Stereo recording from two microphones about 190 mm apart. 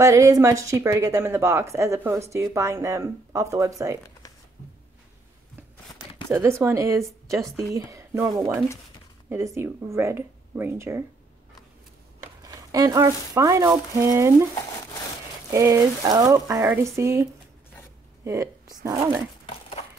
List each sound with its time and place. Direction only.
0.0 s a woman's voice: 15° right (ahead or behind)
6.6 s a woman's voice: 15° right (ahead or behind)
12.4 s a woman's voice: 20° right (ahead or behind)
15.5 s a woman's voice: 15° right (ahead or behind)
18.2 s a sound: 15° right (ahead or behind)